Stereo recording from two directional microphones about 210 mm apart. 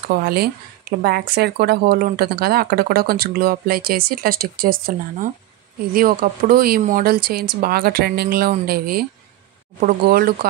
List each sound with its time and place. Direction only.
0.2 s a woman's voice: 45° right (ahead or behind)